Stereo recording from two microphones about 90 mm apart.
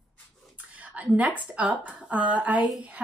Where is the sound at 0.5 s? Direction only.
15° right (ahead or behind).